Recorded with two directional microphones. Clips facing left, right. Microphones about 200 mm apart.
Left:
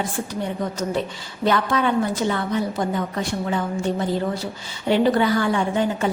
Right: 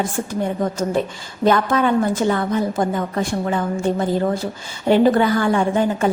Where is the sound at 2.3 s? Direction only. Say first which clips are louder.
Right 4 dB; 50° right (ahead or behind).